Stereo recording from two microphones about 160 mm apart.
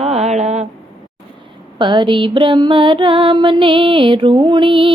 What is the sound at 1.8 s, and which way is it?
Music, 30° right (ahead or behind).